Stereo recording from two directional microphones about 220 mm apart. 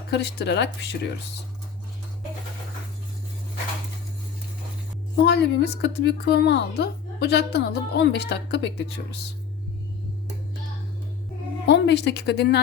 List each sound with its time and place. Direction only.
0.1 s a woman's voice: 50° left (ahead or behind)
5.1 s a woman's voice: 50° left (ahead or behind)
11.6 s speech: 50° left (ahead or behind)